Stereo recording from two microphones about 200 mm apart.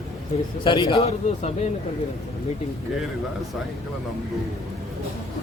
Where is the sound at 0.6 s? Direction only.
20° left (ahead or behind).